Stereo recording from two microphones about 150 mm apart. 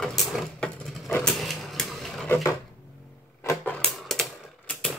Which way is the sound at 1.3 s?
Centre (ahead or behind).